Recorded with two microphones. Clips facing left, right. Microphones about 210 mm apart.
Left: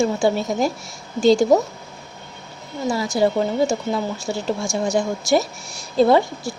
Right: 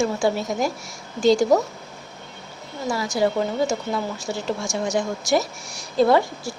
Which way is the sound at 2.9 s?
25° left (ahead or behind).